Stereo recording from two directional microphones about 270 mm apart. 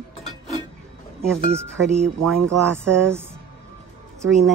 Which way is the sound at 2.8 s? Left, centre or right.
Centre.